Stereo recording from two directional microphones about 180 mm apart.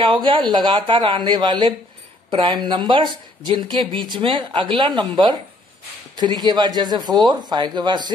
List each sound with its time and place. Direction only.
0.0 s speech: 25° right (ahead or behind)